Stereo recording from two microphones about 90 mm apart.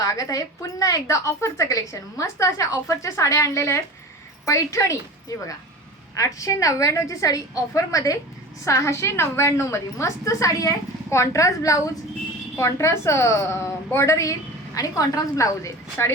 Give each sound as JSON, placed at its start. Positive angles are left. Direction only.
{"t": 0.0, "sound": "a woman's voice", "side_deg": 40}